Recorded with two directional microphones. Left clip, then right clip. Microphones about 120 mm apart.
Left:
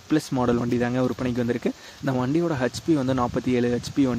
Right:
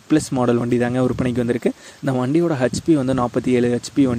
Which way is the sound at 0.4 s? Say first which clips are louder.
Right 5 dB; 30° right (ahead or behind).